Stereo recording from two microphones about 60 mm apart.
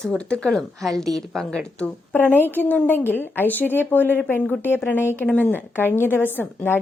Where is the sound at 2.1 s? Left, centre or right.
Left.